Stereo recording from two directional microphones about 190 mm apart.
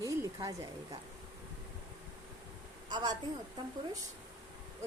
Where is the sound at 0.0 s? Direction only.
15° right (ahead or behind).